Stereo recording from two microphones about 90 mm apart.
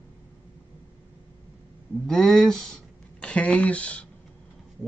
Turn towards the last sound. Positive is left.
turn(degrees=15)  # may be behind; listen again after turning